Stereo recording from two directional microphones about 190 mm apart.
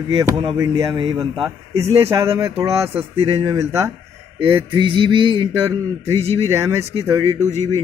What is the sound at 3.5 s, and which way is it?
Speech, 15° right (ahead or behind).